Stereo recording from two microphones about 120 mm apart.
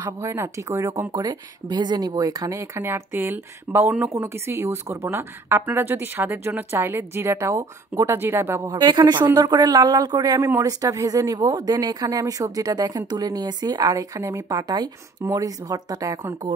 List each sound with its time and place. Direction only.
0.0 s a woman's voice: 20° right (ahead or behind)
1.1 s a woman's voice: 35° right (ahead or behind)
8.7 s a woman's voice: 40° right (ahead or behind)